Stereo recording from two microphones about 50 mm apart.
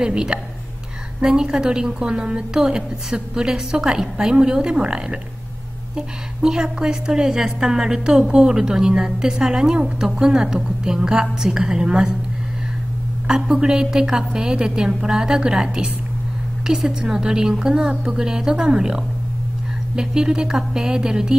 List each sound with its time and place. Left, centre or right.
0.0 s a woman's voice: centre
13.3 s a woman's voice: centre